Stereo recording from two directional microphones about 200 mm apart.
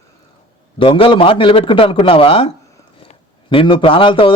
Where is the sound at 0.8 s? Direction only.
25° left (ahead or behind).